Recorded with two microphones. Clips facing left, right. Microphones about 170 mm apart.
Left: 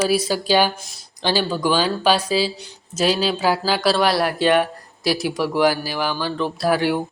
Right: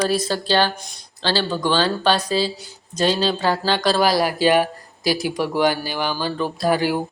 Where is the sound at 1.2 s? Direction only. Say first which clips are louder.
Left 1 dB; 15° left (ahead or behind).